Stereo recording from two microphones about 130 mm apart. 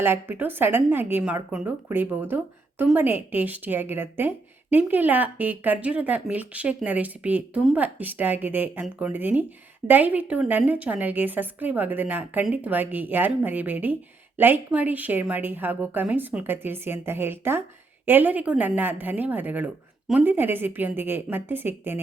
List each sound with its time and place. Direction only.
0.0 s speech: 15° right (ahead or behind)